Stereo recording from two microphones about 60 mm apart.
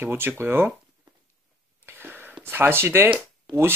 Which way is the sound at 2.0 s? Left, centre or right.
Right.